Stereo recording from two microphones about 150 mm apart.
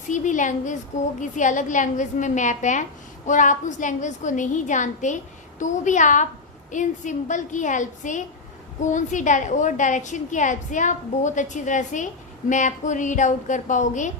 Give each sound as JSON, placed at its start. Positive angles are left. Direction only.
{"t": 0.1, "sound": "a woman's voice", "side_deg": 55}